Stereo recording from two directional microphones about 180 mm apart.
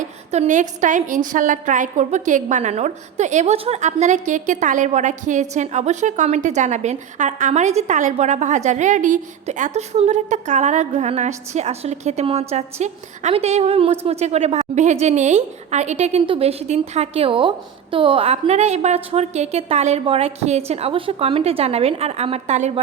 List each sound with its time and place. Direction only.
0.0 s a woman's voice: 40° right (ahead or behind)